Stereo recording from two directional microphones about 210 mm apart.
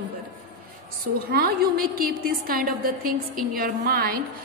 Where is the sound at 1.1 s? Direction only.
45° right (ahead or behind).